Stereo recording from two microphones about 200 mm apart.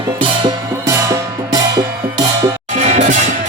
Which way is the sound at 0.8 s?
15° right (ahead or behind).